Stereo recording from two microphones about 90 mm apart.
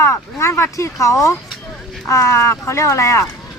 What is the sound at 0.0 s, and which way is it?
Speech, 30° left (ahead or behind).